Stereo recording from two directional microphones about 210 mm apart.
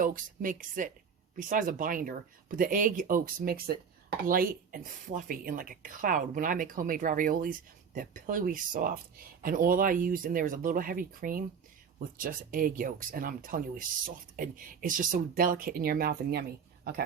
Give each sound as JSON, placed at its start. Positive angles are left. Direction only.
{"t": 0.0, "sound": "speech", "side_deg": -40}